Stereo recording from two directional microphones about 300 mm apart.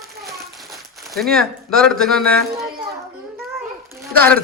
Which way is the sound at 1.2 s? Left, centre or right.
Centre.